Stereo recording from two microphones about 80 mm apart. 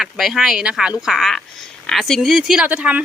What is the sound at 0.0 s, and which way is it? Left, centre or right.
Speech, centre.